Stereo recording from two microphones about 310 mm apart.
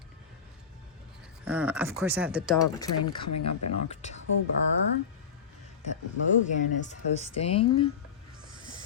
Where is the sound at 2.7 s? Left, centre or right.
Centre.